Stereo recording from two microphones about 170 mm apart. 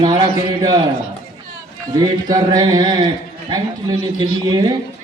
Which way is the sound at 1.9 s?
25° right (ahead or behind).